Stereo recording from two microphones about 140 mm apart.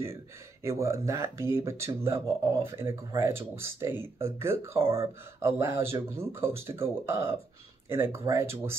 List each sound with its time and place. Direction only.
0.7 s speech: 20° right (ahead or behind)